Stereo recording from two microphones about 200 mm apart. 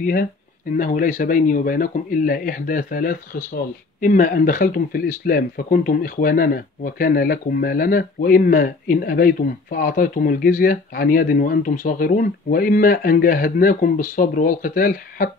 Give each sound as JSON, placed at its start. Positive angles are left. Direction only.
{"t": 0.0, "sound": "speech", "side_deg": 45}